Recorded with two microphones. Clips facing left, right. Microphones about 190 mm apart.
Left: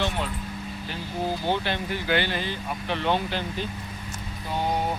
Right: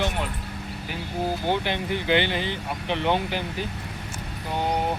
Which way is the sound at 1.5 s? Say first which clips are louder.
Right 1 dB; 15° right (ahead or behind).